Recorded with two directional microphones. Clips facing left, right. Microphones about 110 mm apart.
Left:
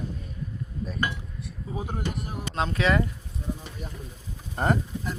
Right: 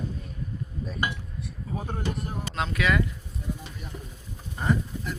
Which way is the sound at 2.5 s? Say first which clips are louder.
Left 2 dB; 30° left (ahead or behind).